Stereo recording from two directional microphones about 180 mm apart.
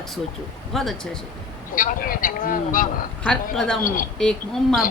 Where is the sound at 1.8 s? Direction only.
50° left (ahead or behind).